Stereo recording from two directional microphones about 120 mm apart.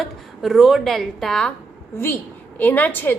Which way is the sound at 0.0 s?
Centre (ahead or behind).